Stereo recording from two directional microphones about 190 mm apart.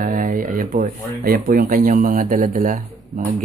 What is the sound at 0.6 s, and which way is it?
Speech, 45° right (ahead or behind).